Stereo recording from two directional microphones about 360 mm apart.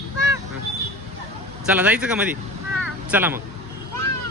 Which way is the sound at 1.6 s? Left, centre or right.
Centre.